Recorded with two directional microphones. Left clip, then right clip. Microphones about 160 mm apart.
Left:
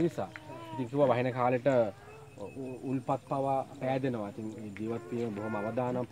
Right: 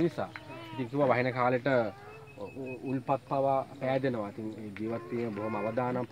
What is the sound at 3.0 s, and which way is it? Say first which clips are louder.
A man's voice: right 3 dB; 25° left (ahead or behind).